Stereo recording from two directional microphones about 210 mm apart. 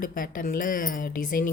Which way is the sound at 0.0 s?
40° left (ahead or behind).